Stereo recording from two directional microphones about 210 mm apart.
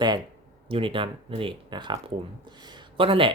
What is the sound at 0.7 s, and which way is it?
Speech, 25° right (ahead or behind).